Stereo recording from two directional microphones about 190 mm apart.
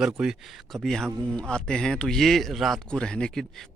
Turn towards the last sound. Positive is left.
turn(degrees=0)  # may be behind; listen again after turning